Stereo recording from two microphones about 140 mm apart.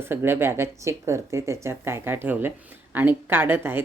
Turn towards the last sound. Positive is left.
turn(degrees=-15)  # may be behind; listen again after turning